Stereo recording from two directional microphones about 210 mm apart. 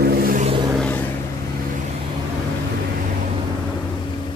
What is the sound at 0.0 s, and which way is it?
Vehicle, 45° right (ahead or behind).